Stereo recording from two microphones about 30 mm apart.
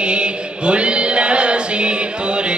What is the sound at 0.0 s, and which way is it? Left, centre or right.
Chant, right.